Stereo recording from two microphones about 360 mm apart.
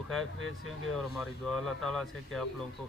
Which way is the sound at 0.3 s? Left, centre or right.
Right.